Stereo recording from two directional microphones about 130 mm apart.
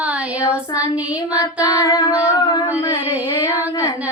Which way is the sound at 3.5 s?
15° right (ahead or behind).